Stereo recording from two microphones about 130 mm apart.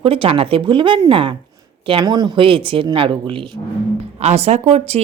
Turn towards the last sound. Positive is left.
turn(degrees=-55)  # may be behind; listen again after turning